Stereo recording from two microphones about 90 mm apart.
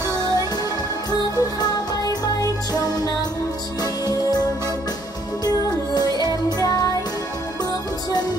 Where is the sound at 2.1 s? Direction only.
45° left (ahead or behind).